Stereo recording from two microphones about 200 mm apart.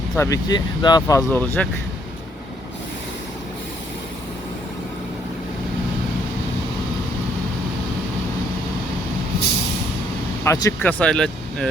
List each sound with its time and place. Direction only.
0.2 s speech: 20° left (ahead or behind)
10.4 s speech: 15° left (ahead or behind)